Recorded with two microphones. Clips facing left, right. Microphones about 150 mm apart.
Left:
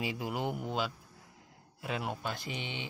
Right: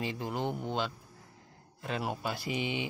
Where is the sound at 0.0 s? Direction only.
10° left (ahead or behind).